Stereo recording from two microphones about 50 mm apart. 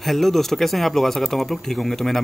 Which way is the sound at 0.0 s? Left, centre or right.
Centre.